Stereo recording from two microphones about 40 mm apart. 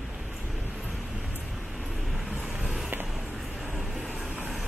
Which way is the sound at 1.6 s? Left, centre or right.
Centre.